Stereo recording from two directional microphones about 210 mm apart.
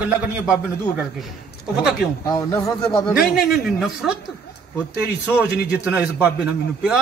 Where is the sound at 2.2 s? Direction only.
20° left (ahead or behind).